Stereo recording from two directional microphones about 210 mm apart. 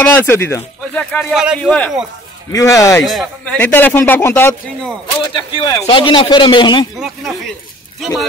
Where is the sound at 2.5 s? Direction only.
15° left (ahead or behind).